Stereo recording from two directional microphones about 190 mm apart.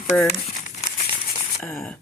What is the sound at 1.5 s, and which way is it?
Speech, 5° left (ahead or behind).